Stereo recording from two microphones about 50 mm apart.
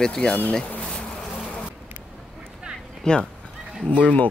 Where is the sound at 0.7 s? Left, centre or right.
Left.